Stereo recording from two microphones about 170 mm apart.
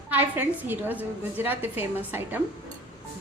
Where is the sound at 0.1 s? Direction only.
10° right (ahead or behind).